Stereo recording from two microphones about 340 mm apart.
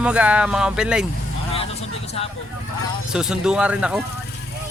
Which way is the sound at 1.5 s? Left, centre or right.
Centre.